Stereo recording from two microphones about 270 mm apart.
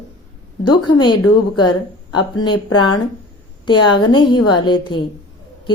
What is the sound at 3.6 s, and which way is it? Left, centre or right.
Speech, centre.